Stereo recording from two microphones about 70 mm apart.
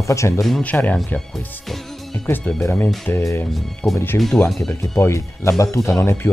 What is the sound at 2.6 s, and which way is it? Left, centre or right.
Speech, left.